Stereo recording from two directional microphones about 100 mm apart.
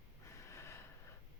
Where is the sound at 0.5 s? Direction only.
30° left (ahead or behind).